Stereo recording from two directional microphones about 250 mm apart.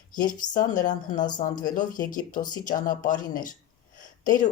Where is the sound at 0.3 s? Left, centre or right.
Left.